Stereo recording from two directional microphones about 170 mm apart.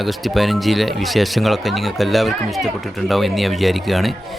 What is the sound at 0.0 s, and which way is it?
Speech, centre (ahead or behind).